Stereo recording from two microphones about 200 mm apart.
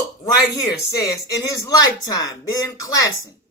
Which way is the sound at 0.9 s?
15° left (ahead or behind).